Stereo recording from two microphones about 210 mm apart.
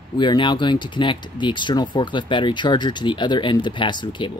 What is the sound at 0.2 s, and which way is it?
Speech, 20° left (ahead or behind).